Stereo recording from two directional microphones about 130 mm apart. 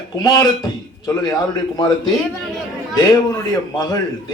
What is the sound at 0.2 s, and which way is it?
A man's voice, 30° left (ahead or behind).